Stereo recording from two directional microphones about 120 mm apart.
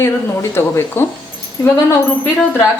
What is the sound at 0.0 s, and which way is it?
Speech, 25° left (ahead or behind).